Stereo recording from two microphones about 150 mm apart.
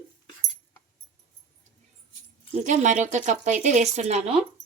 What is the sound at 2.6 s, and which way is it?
Speech, 55° right (ahead or behind).